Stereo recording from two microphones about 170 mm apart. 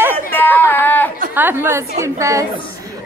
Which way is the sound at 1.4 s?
10° right (ahead or behind).